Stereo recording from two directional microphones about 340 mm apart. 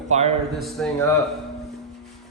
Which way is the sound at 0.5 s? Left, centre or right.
Centre.